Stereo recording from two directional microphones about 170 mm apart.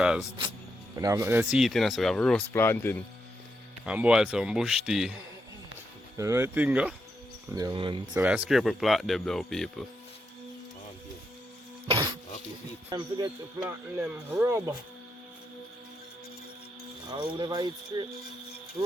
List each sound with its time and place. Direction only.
0.0 s speech: 5° right (ahead or behind)
0.9 s speech: 20° right (ahead or behind); by 3.0 s 10° left (ahead or behind)
3.8 s speech: 5° right (ahead or behind)
6.1 s speech: 15° right (ahead or behind)
7.5 s speech: 25° right (ahead or behind)
8.1 s speech: 5° right (ahead or behind)
11.9 s a sound: 25° right (ahead or behind)
12.9 s speech: 20° right (ahead or behind)
13.6 s speech: 10° right (ahead or behind)
17.1 s speech: 25° right (ahead or behind)